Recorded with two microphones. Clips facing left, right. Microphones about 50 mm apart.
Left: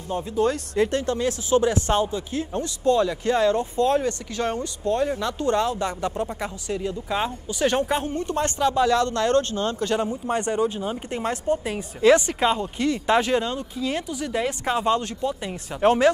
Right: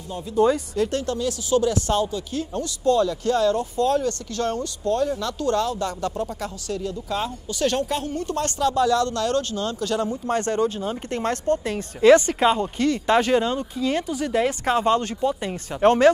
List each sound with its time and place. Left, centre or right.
0.7 s speech: left
10.2 s speech: centre
12.0 s speech: centre